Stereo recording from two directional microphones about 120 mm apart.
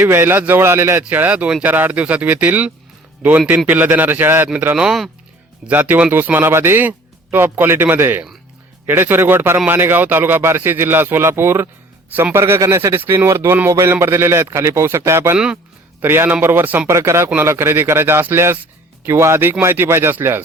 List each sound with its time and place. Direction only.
0.0 s a man's voice: 20° right (ahead or behind)